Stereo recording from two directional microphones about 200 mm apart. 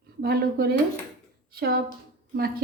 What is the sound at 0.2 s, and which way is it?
Speech, 50° right (ahead or behind).